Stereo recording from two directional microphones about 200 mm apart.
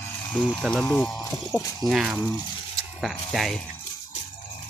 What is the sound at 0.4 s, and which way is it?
Speech, 5° left (ahead or behind).